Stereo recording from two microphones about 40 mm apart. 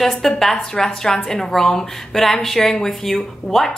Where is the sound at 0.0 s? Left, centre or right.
Centre.